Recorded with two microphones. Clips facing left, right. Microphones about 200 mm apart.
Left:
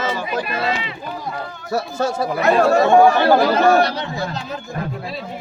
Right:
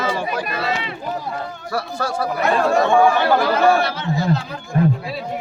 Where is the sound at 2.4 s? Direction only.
40° left (ahead or behind).